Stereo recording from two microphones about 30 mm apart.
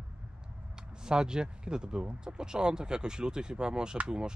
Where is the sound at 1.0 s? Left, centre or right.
Right.